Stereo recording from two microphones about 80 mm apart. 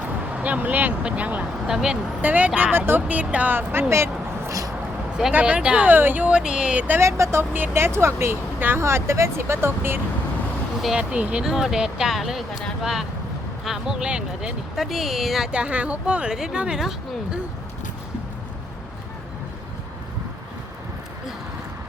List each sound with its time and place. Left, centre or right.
0.3 s a woman's voice: centre
2.2 s speech: centre; by 4.7 s right
5.3 s speech: centre
6.3 s a woman's voice: centre
7.0 s speech: right
10.8 s speech: centre
11.1 s a woman's voice: centre
15.5 s a woman's voice: centre